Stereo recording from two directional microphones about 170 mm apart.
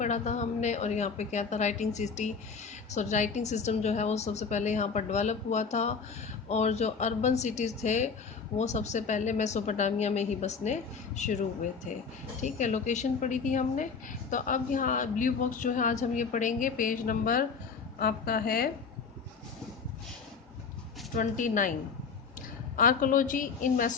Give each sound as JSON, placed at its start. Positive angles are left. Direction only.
{"t": 0.0, "sound": "a woman's voice", "side_deg": 45}
{"t": 12.4, "sound": "a woman's voice", "side_deg": 45}
{"t": 21.2, "sound": "a woman's voice", "side_deg": 50}
{"t": 22.7, "sound": "a woman's voice", "side_deg": 55}